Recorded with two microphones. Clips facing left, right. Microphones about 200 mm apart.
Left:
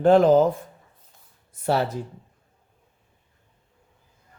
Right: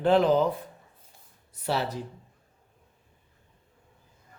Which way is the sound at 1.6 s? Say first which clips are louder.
Left 6 dB; 50° left (ahead or behind).